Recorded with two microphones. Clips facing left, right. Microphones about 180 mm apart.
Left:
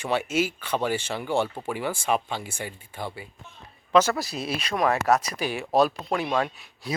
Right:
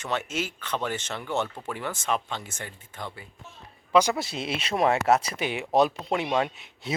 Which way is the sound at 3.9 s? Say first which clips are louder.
Left 1 dB; 15° right (ahead or behind).